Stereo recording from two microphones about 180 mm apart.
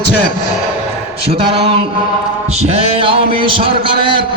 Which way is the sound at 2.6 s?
35° right (ahead or behind).